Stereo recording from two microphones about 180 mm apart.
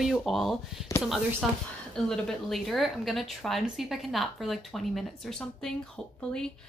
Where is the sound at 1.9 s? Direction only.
Centre (ahead or behind).